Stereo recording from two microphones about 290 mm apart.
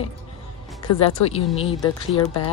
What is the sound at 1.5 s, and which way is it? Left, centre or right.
Speech, centre.